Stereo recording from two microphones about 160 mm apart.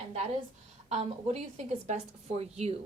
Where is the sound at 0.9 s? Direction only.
40° right (ahead or behind).